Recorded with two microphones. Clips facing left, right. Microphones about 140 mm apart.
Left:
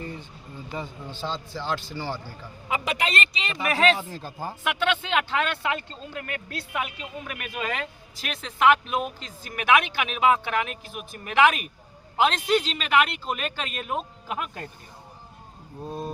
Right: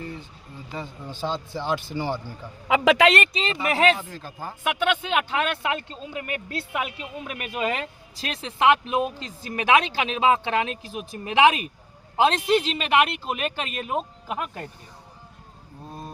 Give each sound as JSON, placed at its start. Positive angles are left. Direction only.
{"t": 1.2, "sound": "speech", "side_deg": -15}
{"t": 2.6, "sound": "speech", "side_deg": -90}
{"t": 3.6, "sound": "speech", "side_deg": -25}
{"t": 3.9, "sound": "speech", "side_deg": 25}
{"t": 4.6, "sound": "speech", "side_deg": -15}
{"t": 13.2, "sound": "speech", "side_deg": -15}
{"t": 14.3, "sound": "speech", "side_deg": -5}
{"t": 15.9, "sound": "speech", "side_deg": 20}